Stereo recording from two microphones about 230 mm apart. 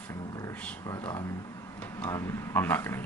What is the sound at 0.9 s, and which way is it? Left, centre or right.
Speech, centre.